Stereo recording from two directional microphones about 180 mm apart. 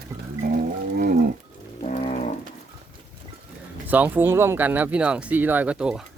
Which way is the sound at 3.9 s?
10° right (ahead or behind).